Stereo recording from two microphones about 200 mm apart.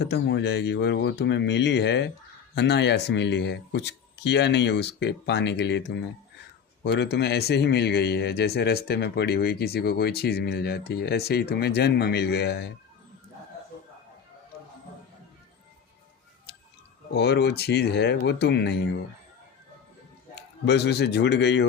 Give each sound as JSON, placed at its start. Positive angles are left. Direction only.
{"t": 0.0, "sound": "speech", "side_deg": 60}
{"t": 17.1, "sound": "speech", "side_deg": 55}
{"t": 20.7, "sound": "speech", "side_deg": 55}